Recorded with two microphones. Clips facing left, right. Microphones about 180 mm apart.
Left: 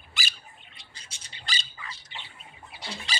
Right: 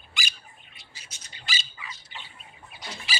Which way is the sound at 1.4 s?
5° right (ahead or behind).